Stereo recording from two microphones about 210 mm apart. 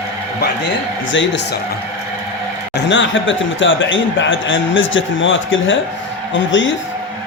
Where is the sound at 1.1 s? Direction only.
60° left (ahead or behind).